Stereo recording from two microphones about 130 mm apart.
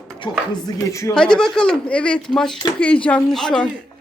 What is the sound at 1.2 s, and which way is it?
Speech, 5° left (ahead or behind).